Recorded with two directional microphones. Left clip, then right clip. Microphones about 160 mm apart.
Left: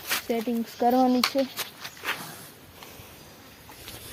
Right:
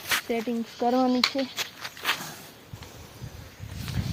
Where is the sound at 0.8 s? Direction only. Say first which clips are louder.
Left 2 dB; 35° left (ahead or behind).